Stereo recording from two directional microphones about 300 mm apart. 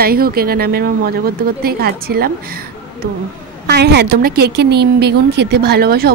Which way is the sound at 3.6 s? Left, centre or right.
Right.